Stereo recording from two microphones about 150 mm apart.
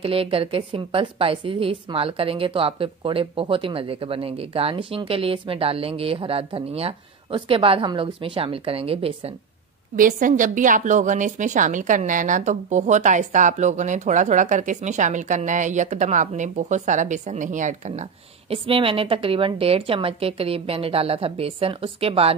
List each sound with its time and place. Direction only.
0.0 s a woman's voice: 40° right (ahead or behind)
9.9 s a woman's voice: 60° right (ahead or behind)
18.5 s a woman's voice: 40° right (ahead or behind)